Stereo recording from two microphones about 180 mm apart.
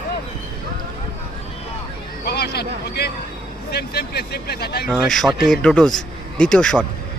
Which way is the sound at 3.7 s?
65° left (ahead or behind).